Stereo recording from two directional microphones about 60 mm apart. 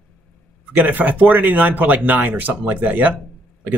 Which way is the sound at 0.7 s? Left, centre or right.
Right.